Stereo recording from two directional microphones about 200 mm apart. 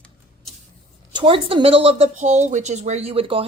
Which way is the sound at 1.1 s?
25° right (ahead or behind).